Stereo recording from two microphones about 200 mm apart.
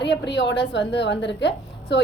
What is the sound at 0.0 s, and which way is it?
A woman's voice, 60° left (ahead or behind).